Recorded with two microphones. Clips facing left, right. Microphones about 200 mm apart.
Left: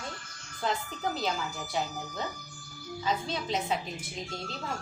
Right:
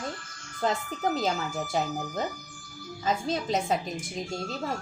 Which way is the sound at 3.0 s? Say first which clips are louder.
Right 4 dB; 45° right (ahead or behind).